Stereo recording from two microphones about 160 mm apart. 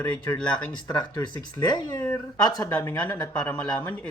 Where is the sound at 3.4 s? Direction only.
5° left (ahead or behind).